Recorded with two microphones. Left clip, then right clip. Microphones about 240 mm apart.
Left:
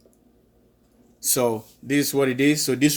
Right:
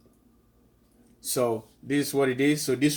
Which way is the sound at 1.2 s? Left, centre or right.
Left.